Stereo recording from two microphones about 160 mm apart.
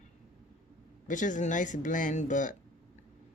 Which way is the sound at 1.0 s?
50° left (ahead or behind).